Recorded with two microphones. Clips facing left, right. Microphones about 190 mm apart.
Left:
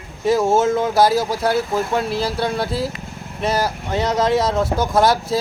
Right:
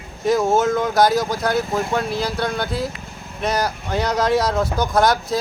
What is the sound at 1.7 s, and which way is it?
Speech, 5° left (ahead or behind).